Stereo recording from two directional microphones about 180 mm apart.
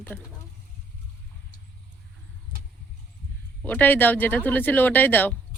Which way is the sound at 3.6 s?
10° left (ahead or behind).